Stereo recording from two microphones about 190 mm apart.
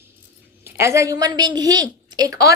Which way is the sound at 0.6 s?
15° right (ahead or behind).